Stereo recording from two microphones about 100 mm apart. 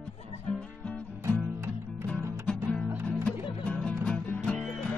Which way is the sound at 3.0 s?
15° left (ahead or behind).